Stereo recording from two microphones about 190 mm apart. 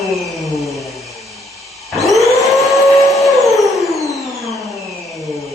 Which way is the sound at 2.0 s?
Centre (ahead or behind).